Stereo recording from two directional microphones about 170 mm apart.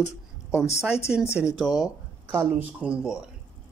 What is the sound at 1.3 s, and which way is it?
Speech, 5° right (ahead or behind).